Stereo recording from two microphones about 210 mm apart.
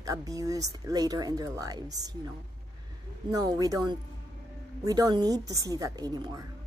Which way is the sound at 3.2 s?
15° right (ahead or behind).